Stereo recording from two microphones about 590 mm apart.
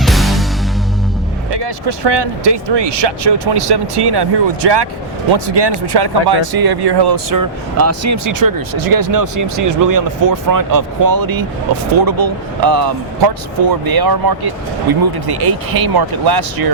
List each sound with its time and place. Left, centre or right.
0.0 s music: centre
1.5 s speech: right